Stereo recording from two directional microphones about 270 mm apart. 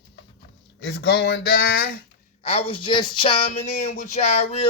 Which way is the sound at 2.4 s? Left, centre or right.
Left.